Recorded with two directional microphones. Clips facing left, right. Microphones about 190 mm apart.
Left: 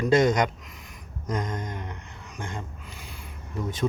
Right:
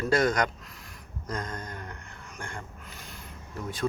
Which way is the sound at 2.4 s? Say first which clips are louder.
Left 5 dB; 20° left (ahead or behind).